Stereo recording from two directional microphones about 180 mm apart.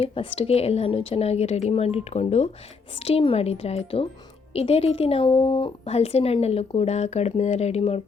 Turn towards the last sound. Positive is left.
turn(degrees=35)  # may be behind; listen again after turning